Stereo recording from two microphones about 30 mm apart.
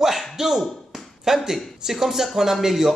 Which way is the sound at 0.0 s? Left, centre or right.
Centre.